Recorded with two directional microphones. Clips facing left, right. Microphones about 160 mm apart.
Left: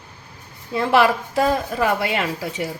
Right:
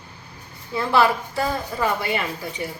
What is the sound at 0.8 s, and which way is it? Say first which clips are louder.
A woman's voice: left 2 dB; 90° left.